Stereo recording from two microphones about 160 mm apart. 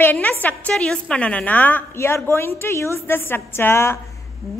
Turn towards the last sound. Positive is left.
turn(degrees=15)  # may be behind; listen again after turning